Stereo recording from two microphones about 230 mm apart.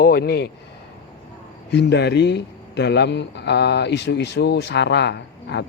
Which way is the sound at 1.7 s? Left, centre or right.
Left.